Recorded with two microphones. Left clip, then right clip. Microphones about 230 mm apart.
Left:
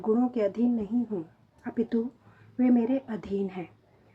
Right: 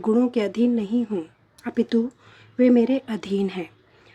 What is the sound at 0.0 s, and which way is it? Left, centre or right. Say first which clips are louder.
Speech: right 5 dB; right.